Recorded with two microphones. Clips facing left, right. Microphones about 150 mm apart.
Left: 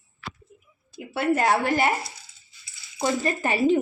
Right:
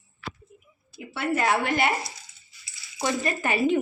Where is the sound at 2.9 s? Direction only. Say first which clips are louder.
Left 2 dB; 30° left (ahead or behind).